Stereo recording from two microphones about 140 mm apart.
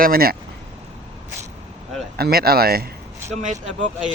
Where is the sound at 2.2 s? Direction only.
90° right.